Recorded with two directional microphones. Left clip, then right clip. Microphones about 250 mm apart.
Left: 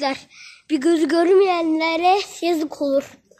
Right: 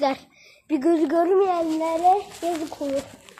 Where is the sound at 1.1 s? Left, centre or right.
Left.